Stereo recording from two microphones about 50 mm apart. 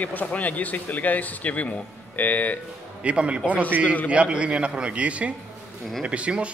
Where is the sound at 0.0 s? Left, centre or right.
Left.